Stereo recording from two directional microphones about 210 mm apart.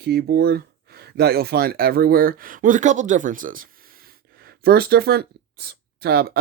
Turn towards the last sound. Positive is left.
turn(degrees=-50)  # may be behind; listen again after turning